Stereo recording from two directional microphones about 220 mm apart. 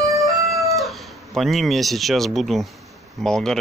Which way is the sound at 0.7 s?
Centre (ahead or behind).